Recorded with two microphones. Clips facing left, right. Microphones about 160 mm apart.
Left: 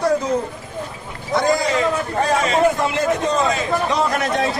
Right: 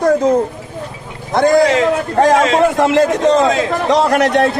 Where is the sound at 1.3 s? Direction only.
75° right (ahead or behind).